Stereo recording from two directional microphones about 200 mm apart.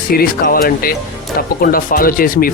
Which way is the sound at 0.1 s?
45° left (ahead or behind).